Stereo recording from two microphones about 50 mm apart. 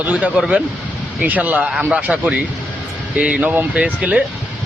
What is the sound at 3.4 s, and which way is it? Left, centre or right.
Speech, right.